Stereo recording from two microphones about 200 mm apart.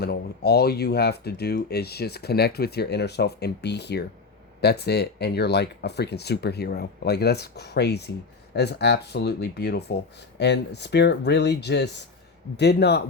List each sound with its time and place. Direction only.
0.0 s speech: 55° left (ahead or behind)